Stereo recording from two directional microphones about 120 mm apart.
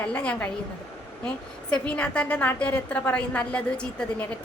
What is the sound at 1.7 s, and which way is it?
A woman's voice, 10° left (ahead or behind).